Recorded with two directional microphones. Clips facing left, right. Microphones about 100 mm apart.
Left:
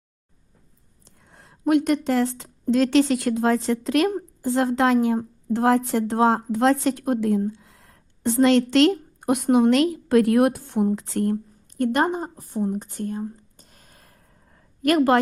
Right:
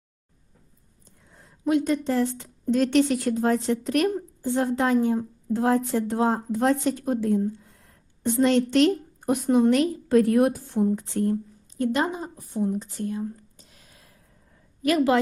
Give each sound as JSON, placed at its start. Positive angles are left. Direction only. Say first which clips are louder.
{"t": 1.0, "sound": "a woman's voice", "louder": "left 2 dB", "side_deg": 70}
{"t": 12.7, "sound": "speech", "louder": "left 1 dB", "side_deg": 50}
{"t": 13.6, "sound": "a sound", "louder": "left 1 dB", "side_deg": 45}